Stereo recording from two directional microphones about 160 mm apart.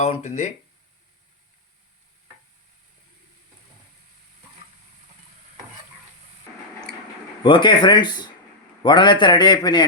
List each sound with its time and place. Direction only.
0.0 s speech: 50° left (ahead or behind)
7.4 s a man's voice: 30° left (ahead or behind)